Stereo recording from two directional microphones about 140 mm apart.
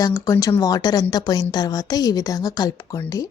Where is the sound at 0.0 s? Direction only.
25° left (ahead or behind).